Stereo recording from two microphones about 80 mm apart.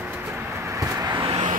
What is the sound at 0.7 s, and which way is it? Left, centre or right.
Vehicle, right.